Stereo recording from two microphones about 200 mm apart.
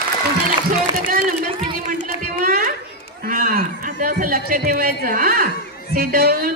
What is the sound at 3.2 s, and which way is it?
A man's voice, 45° right (ahead or behind).